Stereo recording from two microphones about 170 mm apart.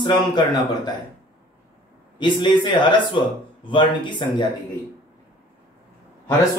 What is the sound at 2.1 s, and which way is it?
Speech, 25° left (ahead or behind).